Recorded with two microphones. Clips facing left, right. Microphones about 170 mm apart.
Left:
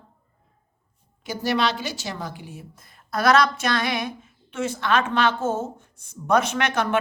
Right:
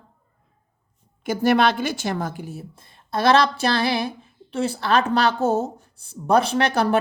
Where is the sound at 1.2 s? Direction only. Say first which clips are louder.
Right 5 dB; 50° right (ahead or behind).